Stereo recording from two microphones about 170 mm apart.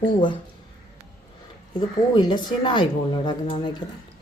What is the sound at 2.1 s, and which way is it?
Speech, 25° left (ahead or behind).